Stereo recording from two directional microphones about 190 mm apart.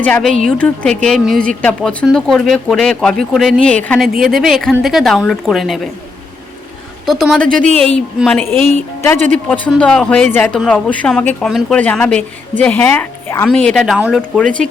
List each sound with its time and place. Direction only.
0.0 s speech: 5° left (ahead or behind)
7.0 s speech: centre (ahead or behind)
9.1 s speech: 40° right (ahead or behind)
9.5 s speech: 5° left (ahead or behind)